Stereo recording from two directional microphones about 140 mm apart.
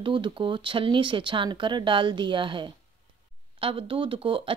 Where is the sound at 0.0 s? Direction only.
35° right (ahead or behind).